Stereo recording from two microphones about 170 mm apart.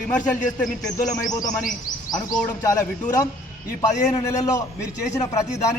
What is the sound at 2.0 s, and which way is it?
A man's voice, 25° left (ahead or behind).